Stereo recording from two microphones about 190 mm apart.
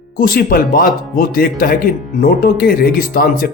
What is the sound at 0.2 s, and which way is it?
Speech, 50° left (ahead or behind).